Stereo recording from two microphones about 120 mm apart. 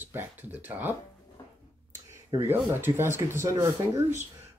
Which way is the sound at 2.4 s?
20° right (ahead or behind).